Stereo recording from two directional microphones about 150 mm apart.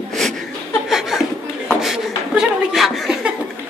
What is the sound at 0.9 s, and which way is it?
Laughter, centre (ahead or behind).